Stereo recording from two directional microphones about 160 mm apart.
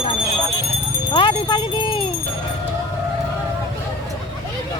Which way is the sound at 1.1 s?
30° left (ahead or behind).